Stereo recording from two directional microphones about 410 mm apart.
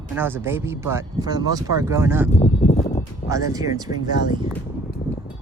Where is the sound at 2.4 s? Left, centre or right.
Centre.